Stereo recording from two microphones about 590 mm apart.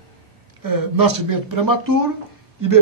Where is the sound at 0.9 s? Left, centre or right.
Right.